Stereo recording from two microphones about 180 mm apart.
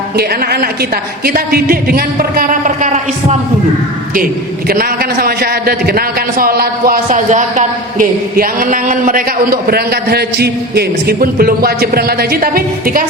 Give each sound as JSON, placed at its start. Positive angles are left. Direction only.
{"t": 0.2, "sound": "a man's voice", "side_deg": -60}
{"t": 4.7, "sound": "a man's voice", "side_deg": -55}